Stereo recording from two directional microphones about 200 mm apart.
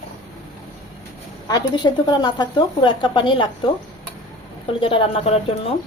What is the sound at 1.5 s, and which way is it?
Speech, 20° left (ahead or behind).